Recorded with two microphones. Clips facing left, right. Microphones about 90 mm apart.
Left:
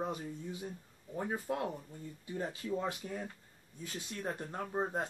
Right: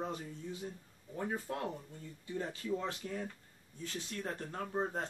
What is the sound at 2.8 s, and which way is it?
Speech, 20° left (ahead or behind).